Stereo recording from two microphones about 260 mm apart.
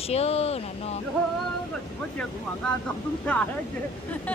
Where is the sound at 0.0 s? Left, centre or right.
Left.